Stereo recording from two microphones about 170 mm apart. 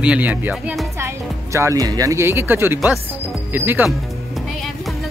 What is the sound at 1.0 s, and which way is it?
Speech, 15° right (ahead or behind).